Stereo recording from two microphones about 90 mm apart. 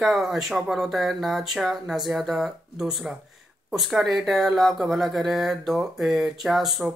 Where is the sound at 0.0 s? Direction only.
Centre (ahead or behind).